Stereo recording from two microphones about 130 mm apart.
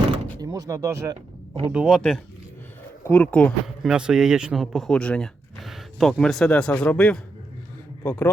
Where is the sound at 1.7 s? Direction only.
5° right (ahead or behind); by 3.5 s 10° left (ahead or behind).